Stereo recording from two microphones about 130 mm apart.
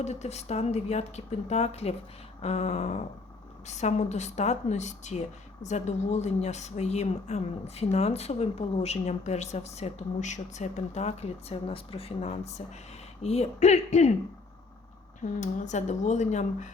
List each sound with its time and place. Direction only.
0.0 s speech: 60° left (ahead or behind)
15.2 s speech: 65° left (ahead or behind)